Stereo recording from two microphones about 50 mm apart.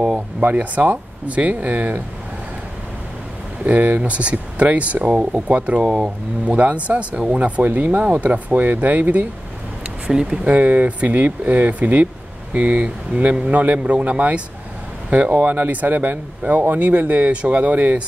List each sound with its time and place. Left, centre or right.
0.4 s speech: right
3.6 s speech: right
5.9 s speech: centre
6.4 s speech: right
10.0 s speech: centre
10.5 s speech: right
12.5 s speech: right